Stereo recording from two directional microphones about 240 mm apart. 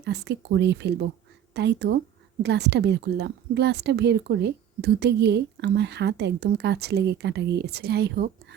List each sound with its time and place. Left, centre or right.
0.0 s speech: right